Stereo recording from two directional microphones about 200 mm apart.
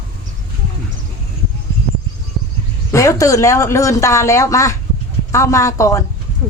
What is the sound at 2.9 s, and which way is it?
Speech, 15° left (ahead or behind).